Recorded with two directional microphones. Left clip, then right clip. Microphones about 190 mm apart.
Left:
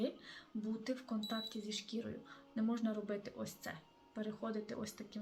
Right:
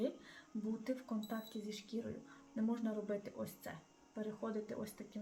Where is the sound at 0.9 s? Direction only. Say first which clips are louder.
Left 3 dB; 5° right (ahead or behind).